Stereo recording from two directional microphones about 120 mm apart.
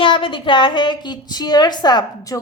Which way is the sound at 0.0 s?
45° left (ahead or behind).